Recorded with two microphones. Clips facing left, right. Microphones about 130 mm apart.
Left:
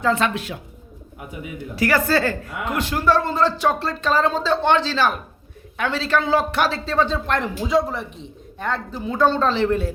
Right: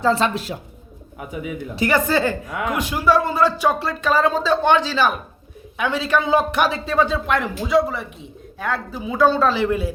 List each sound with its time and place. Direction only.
0.0 s a woman's voice: 35° right (ahead or behind)
1.7 s a woman's voice: 20° right (ahead or behind)